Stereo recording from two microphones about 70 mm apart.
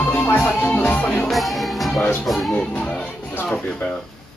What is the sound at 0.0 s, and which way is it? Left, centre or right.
Music, left.